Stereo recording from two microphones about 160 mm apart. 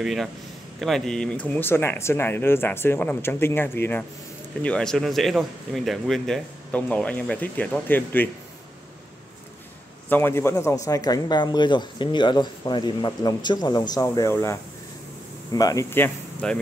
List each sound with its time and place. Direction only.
0.0 s a man's voice: centre (ahead or behind)
10.0 s a man's voice: 15° left (ahead or behind)